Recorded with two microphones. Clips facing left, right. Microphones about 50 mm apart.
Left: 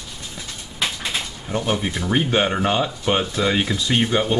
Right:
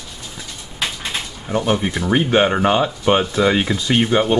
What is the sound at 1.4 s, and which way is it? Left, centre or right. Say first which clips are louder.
Speech: right 5 dB; centre.